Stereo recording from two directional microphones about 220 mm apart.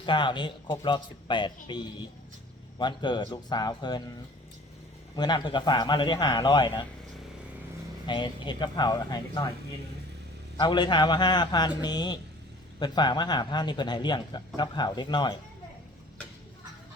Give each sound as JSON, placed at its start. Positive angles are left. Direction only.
{"t": 0.0, "sound": "a man's voice", "side_deg": 20}
{"t": 5.1, "sound": "a man's voice", "side_deg": 20}
{"t": 8.0, "sound": "a man's voice", "side_deg": 20}
{"t": 10.6, "sound": "a man's voice", "side_deg": 20}